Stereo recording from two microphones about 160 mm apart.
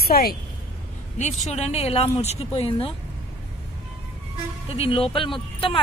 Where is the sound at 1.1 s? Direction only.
45° left (ahead or behind).